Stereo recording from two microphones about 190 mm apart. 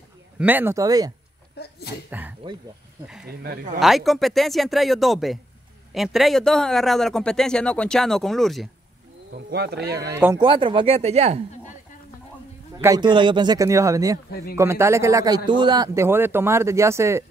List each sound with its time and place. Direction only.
0.4 s a man's voice: 10° right (ahead or behind)
3.8 s speech: centre (ahead or behind)
9.5 s speech: 55° right (ahead or behind)
10.1 s speech: 15° right (ahead or behind); by 11.4 s 35° right (ahead or behind)
12.8 s a man's voice: 20° right (ahead or behind)